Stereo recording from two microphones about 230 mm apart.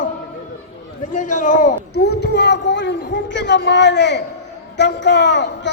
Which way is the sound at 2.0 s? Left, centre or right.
Left.